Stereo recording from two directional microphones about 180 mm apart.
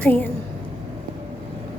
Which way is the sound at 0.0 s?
10° left (ahead or behind).